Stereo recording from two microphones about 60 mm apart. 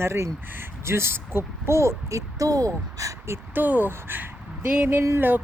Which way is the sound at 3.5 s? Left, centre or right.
Right.